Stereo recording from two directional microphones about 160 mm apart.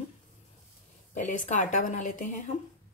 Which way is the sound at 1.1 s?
50° left (ahead or behind).